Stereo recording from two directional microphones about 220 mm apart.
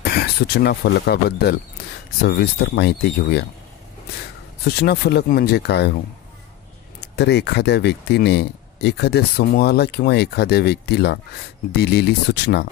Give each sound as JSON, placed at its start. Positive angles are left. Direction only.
{"t": 0.0, "sound": "speech", "side_deg": 45}
{"t": 4.6, "sound": "speech", "side_deg": 45}
{"t": 7.0, "sound": "speech", "side_deg": 50}